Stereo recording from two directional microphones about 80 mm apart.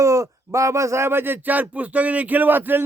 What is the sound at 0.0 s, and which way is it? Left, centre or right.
Speech, right.